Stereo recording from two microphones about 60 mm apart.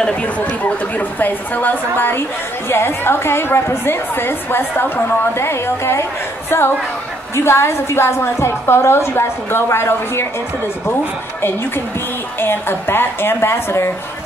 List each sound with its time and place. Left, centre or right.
0.0 s a woman's voice: left
12.4 s a woman's voice: left